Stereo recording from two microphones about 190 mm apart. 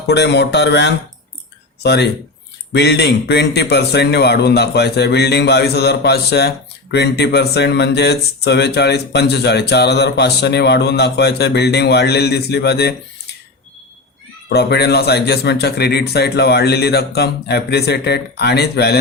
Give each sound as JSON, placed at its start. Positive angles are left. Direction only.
{"t": 0.1, "sound": "speech", "side_deg": 65}
{"t": 14.5, "sound": "speech", "side_deg": 60}